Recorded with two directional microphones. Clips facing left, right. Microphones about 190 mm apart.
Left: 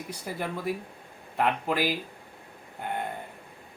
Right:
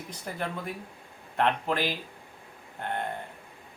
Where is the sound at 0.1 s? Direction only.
10° left (ahead or behind).